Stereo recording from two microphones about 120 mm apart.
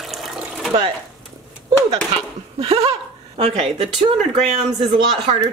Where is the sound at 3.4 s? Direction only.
55° right (ahead or behind).